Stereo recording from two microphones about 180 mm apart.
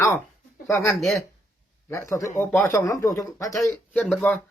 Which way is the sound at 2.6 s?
15° left (ahead or behind).